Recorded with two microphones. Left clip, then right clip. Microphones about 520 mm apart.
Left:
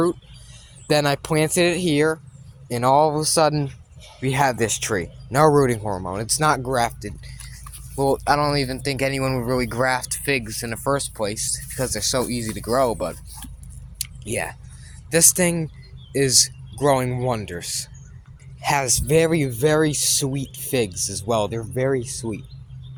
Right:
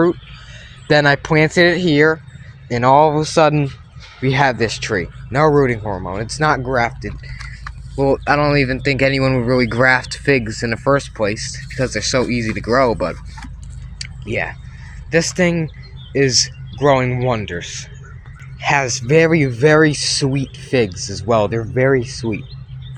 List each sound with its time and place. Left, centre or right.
0.9 s speech: left
14.0 s chewing: left
15.1 s speech: left